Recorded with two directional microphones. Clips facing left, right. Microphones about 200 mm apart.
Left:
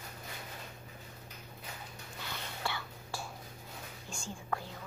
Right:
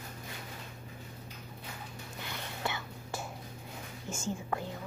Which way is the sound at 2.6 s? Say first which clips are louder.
Right 3 dB; 20° right (ahead or behind).